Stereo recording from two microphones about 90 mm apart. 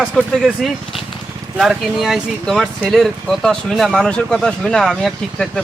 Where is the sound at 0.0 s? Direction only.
Centre (ahead or behind).